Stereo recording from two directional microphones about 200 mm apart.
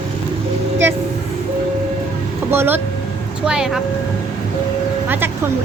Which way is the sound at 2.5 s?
10° right (ahead or behind).